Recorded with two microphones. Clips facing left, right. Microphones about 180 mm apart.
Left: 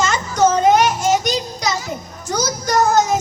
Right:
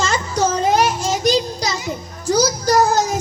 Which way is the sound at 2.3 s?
30° right (ahead or behind).